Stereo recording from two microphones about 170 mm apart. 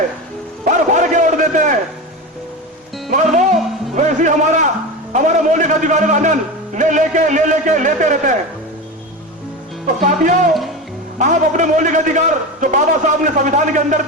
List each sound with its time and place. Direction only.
0.6 s a sound: 45° right (ahead or behind)
3.9 s music: 45° right (ahead or behind)
5.1 s a man's voice: 45° right (ahead or behind)
9.8 s a man's voice: 50° right (ahead or behind)